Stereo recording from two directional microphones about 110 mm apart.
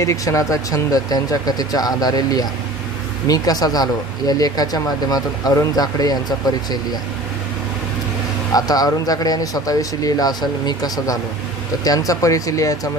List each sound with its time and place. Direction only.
0.0 s speech: 30° left (ahead or behind)
8.5 s speech: 35° left (ahead or behind)